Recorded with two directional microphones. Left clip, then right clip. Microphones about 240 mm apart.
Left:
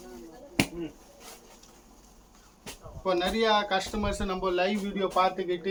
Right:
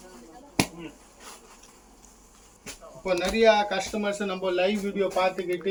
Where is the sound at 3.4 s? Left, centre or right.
Centre.